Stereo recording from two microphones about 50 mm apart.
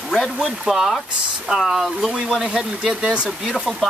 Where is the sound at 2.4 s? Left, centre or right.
Centre.